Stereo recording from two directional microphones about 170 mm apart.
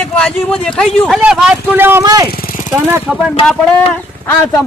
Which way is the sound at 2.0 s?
25° right (ahead or behind).